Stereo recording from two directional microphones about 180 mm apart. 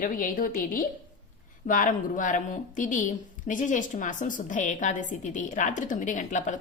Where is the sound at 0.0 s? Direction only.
50° left (ahead or behind).